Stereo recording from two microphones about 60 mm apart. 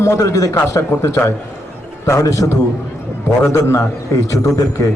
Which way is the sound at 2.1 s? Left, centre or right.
Left.